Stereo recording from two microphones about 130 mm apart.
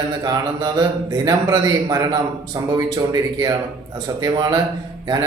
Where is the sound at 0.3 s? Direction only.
35° right (ahead or behind).